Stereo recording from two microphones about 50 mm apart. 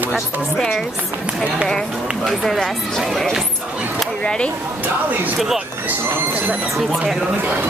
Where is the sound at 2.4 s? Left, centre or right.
Centre.